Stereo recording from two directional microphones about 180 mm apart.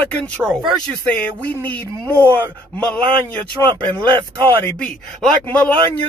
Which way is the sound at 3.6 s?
25° right (ahead or behind).